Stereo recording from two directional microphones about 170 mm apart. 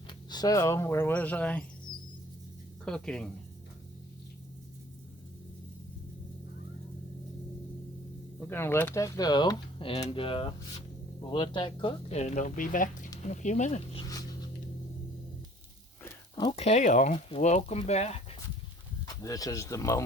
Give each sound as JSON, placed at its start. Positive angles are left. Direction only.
{"t": 0.1, "sound": "speech", "side_deg": 25}
{"t": 2.8, "sound": "speech", "side_deg": 5}
{"t": 8.4, "sound": "speech", "side_deg": 15}
{"t": 16.3, "sound": "speech", "side_deg": 30}
{"t": 19.0, "sound": "speech", "side_deg": 20}